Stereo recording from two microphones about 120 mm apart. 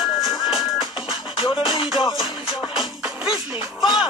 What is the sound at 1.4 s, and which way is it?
Music, 40° left (ahead or behind).